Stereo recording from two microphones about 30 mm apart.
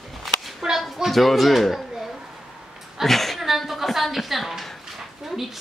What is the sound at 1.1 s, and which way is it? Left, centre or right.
Speech, centre.